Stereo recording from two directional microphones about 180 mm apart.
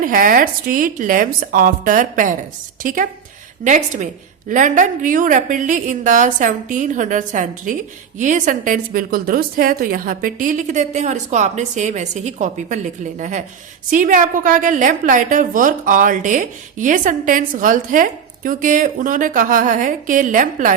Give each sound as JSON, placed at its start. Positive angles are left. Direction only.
{"t": 0.0, "sound": "a woman's voice", "side_deg": -50}